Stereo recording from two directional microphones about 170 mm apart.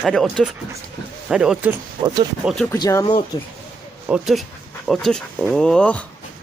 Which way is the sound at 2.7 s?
20° left (ahead or behind).